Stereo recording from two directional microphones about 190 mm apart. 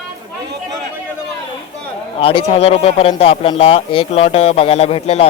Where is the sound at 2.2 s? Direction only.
30° left (ahead or behind).